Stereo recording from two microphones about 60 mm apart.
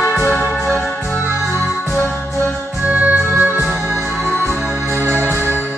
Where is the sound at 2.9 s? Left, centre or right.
Right.